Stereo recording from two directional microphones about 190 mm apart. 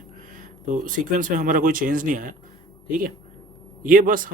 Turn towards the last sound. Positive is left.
turn(degrees=-45)  # may be behind; listen again after turning